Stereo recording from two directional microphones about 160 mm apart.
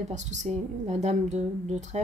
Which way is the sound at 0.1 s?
45° right (ahead or behind).